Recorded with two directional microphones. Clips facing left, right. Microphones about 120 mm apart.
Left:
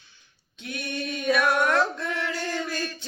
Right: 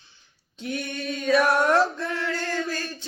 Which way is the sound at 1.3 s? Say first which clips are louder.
Right 4 dB; 35° right (ahead or behind).